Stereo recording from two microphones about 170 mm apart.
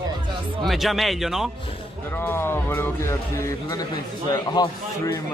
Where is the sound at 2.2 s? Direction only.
15° left (ahead or behind).